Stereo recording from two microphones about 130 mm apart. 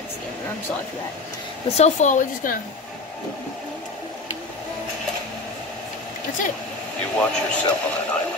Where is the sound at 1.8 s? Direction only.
70° left (ahead or behind).